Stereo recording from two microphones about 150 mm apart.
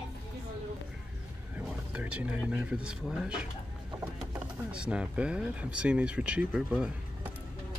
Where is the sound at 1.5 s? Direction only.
10° right (ahead or behind).